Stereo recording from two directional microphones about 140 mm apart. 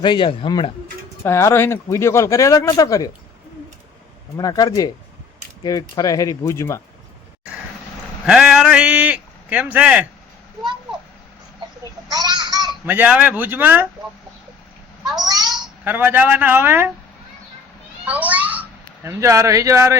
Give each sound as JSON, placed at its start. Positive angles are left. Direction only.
{"t": 0.0, "sound": "speech", "side_deg": 35}
{"t": 1.2, "sound": "speech", "side_deg": 20}
{"t": 4.4, "sound": "speech", "side_deg": 25}
{"t": 6.0, "sound": "speech", "side_deg": 25}
{"t": 8.3, "sound": "a man's voice", "side_deg": -5}
{"t": 12.0, "sound": "a sound", "side_deg": -30}
{"t": 12.8, "sound": "a man's voice", "side_deg": -10}
{"t": 15.2, "sound": "a sound", "side_deg": -30}
{"t": 15.8, "sound": "a man's voice", "side_deg": -15}
{"t": 18.0, "sound": "a child's voice", "side_deg": -10}